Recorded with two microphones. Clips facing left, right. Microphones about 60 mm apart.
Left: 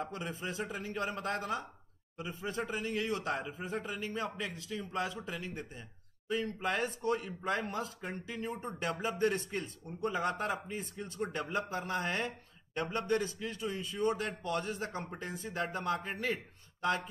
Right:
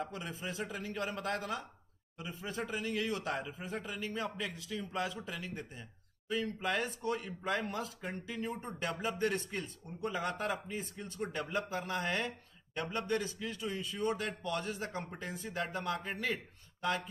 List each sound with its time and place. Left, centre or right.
0.0 s speech: centre